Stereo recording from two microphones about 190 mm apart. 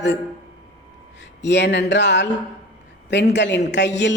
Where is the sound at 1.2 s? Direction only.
65° left (ahead or behind).